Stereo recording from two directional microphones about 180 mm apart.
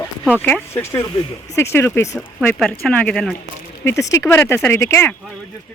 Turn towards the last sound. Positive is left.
turn(degrees=15)  # may be behind; listen again after turning